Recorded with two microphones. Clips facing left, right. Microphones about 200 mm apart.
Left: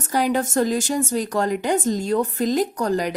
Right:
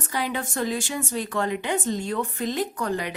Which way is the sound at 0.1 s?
40° left (ahead or behind).